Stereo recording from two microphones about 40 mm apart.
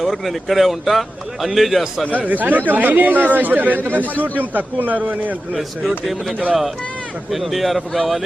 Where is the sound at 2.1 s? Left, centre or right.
Right.